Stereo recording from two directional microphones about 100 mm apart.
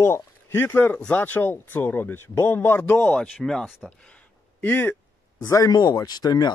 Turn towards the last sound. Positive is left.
turn(degrees=40)  # may be behind; listen again after turning